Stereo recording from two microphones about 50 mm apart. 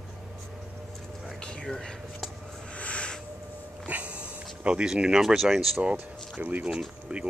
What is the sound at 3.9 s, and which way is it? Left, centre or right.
Snort, right.